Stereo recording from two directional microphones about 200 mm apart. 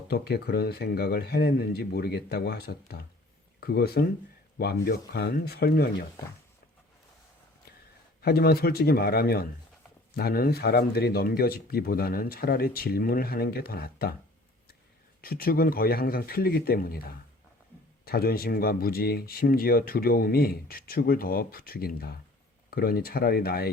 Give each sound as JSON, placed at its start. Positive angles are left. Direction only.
{"t": 0.1, "sound": "speech", "side_deg": 50}
{"t": 8.2, "sound": "speech", "side_deg": 50}
{"t": 15.2, "sound": "speech", "side_deg": 50}